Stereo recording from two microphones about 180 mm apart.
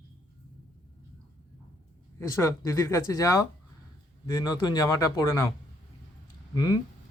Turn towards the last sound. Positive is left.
turn(degrees=20)  # may be behind; listen again after turning